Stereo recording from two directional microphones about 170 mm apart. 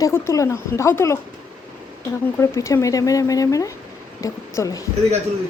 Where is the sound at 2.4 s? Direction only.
15° left (ahead or behind).